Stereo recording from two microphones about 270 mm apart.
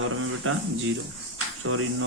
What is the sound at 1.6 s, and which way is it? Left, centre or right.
Speech, right.